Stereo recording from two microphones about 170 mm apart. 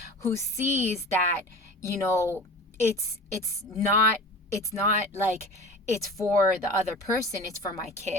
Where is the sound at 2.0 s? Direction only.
15° left (ahead or behind).